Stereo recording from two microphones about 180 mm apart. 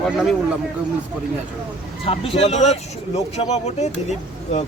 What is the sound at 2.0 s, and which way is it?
Speech, 30° left (ahead or behind).